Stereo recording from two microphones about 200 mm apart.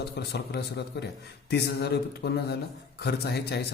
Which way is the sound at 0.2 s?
55° left (ahead or behind).